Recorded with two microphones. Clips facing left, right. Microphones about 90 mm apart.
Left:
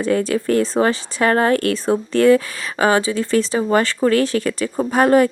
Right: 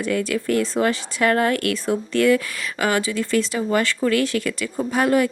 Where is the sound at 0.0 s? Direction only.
35° left (ahead or behind).